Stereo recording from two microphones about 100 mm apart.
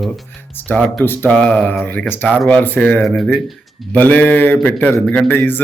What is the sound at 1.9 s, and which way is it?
Speech, 20° left (ahead or behind).